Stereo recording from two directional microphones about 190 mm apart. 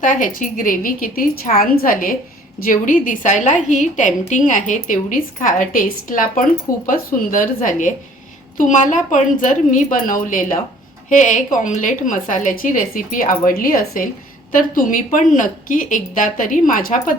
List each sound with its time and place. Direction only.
0.0 s a woman's voice: 45° left (ahead or behind)